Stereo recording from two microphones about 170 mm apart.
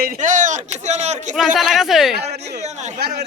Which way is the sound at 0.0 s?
50° right (ahead or behind).